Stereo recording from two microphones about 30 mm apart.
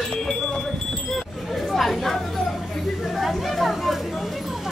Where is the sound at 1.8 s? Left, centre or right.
Centre.